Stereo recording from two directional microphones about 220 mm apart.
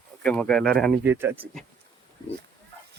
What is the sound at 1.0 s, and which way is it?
Speech, 10° right (ahead or behind).